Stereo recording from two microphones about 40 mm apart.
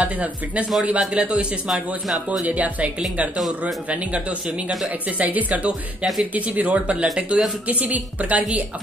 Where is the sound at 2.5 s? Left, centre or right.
Right.